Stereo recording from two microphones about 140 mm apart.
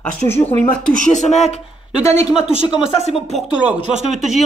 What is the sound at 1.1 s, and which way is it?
Speech, 60° left (ahead or behind).